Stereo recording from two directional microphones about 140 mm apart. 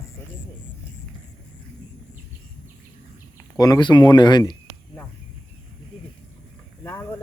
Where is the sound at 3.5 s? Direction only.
25° left (ahead or behind).